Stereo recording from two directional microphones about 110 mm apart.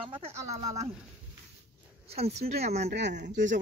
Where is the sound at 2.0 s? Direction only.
70° right (ahead or behind).